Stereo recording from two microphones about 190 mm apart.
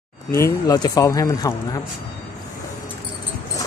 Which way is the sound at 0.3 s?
15° left (ahead or behind).